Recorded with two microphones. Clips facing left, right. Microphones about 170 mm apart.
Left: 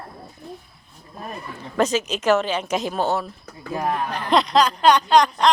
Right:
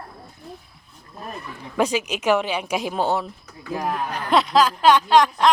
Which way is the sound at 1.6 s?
10° right (ahead or behind).